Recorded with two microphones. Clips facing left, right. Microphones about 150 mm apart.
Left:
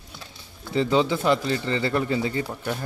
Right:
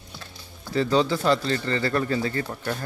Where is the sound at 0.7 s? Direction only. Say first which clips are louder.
Even; 20° left (ahead or behind).